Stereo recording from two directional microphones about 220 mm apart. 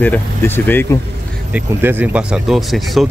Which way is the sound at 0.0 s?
10° left (ahead or behind).